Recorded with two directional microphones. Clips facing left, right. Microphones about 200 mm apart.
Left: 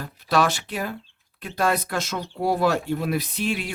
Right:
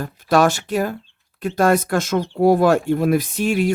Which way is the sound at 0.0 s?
45° right (ahead or behind).